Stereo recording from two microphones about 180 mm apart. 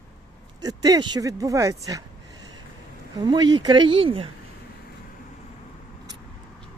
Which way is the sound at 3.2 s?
25° right (ahead or behind).